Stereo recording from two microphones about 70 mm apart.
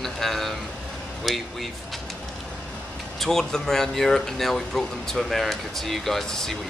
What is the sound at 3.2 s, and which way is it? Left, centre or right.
Speech, centre.